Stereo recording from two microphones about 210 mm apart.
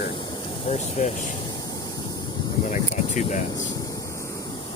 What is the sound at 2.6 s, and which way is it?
Speech, 35° left (ahead or behind).